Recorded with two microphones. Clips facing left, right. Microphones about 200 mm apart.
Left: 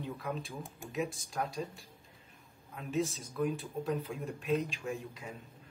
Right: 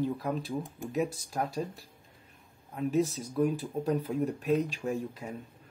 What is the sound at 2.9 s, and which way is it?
Speech, 40° right (ahead or behind).